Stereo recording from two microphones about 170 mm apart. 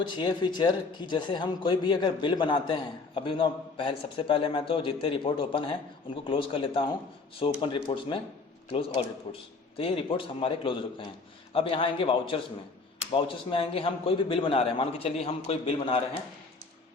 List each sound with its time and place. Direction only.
0.0 s a man's voice: 25° left (ahead or behind)